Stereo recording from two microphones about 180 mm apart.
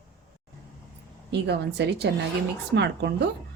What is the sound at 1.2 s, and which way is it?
A woman's voice, 70° right (ahead or behind).